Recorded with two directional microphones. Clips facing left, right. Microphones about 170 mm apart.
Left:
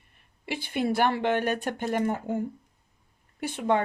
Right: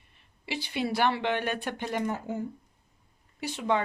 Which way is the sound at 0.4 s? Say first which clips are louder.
Left 3 dB; 50° left (ahead or behind).